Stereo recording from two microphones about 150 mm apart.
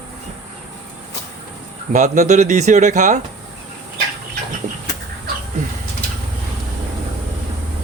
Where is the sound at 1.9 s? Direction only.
55° right (ahead or behind).